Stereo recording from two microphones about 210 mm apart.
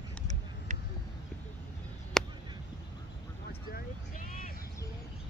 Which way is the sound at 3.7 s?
45° left (ahead or behind).